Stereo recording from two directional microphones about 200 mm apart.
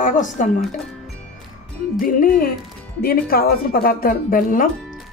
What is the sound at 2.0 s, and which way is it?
A woman's voice, 45° left (ahead or behind).